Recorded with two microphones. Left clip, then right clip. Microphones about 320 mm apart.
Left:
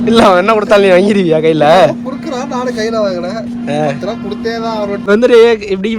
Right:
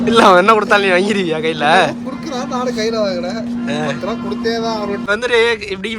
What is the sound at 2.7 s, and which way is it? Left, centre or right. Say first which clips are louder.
Speech: left 4 dB; left.